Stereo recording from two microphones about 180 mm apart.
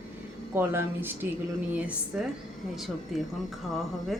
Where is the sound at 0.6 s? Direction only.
10° right (ahead or behind).